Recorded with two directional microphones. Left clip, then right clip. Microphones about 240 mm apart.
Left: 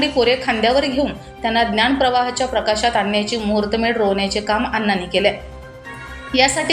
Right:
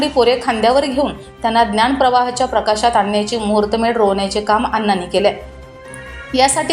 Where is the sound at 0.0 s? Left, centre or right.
Centre.